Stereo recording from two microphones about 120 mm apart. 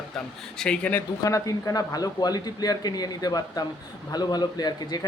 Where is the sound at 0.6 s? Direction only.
10° left (ahead or behind).